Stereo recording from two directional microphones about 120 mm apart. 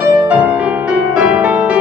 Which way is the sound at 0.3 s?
10° right (ahead or behind).